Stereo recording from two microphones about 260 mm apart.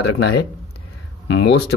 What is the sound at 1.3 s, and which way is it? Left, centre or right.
Speech, left.